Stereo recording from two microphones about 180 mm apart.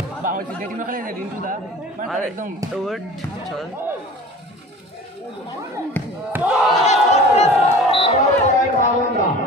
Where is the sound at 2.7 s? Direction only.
Centre (ahead or behind).